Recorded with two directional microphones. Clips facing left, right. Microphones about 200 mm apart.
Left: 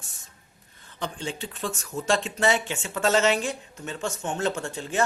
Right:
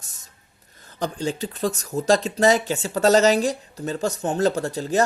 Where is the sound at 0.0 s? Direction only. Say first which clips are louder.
Left 1 dB; 40° right (ahead or behind).